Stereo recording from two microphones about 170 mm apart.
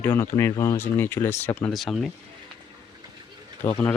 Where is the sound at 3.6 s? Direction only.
50° left (ahead or behind).